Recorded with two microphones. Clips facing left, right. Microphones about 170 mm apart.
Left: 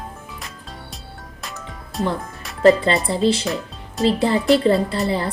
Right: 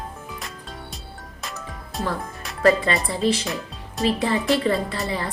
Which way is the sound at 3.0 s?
30° left (ahead or behind).